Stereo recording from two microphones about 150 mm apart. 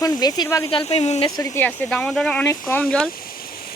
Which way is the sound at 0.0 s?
25° left (ahead or behind).